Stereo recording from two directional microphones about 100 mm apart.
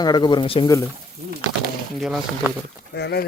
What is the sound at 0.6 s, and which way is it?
Speech, 40° left (ahead or behind).